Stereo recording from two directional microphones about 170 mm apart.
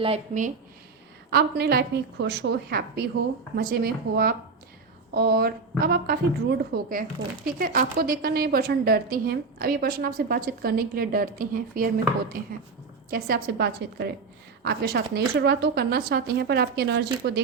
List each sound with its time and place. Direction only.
1.3 s a woman's voice: 70° right (ahead or behind)
13.1 s a woman's voice: 60° right (ahead or behind); by 17.4 s 75° right (ahead or behind)